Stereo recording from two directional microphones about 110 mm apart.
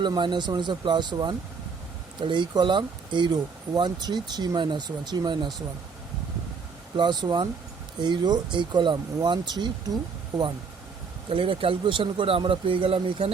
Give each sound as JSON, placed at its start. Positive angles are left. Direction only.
{"t": 0.0, "sound": "speech", "side_deg": -45}
{"t": 6.9, "sound": "speech", "side_deg": -40}
{"t": 11.3, "sound": "speech", "side_deg": -55}